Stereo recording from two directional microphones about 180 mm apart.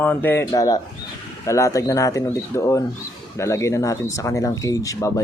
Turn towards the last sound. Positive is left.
turn(degrees=20)  # may be behind; listen again after turning